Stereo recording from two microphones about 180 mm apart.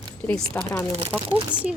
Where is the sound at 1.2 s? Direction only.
30° right (ahead or behind).